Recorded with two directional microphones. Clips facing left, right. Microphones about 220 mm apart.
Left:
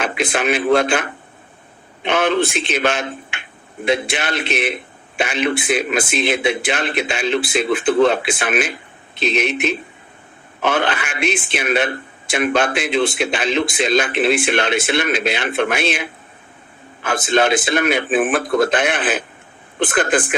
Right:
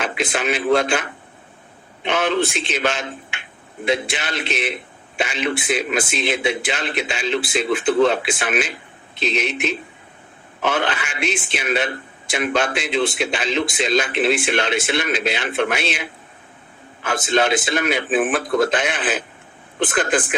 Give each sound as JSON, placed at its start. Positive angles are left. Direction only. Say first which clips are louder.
{"t": 0.0, "sound": "speech", "louder": "left 3 dB", "side_deg": 55}
{"t": 2.0, "sound": "speech", "louder": "left 3 dB", "side_deg": 55}